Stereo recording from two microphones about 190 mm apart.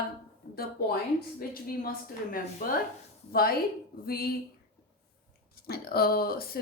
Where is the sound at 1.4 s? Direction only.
50° left (ahead or behind).